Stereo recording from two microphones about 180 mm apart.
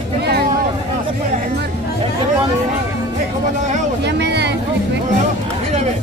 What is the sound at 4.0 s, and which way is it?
Vehicle, 70° right (ahead or behind).